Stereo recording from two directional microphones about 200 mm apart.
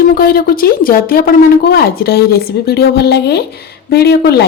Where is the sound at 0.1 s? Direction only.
50° left (ahead or behind).